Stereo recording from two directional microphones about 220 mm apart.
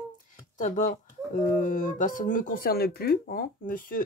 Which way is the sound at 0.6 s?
35° left (ahead or behind).